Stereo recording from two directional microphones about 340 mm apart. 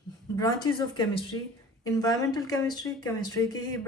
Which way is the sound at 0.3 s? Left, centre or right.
Centre.